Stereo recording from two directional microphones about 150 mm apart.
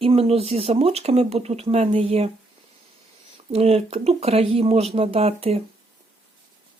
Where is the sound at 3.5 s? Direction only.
40° right (ahead or behind).